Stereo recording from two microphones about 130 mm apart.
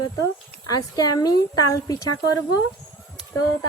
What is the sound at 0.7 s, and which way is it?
Speech, 30° left (ahead or behind).